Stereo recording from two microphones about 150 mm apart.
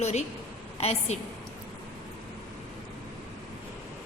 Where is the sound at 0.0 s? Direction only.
45° left (ahead or behind).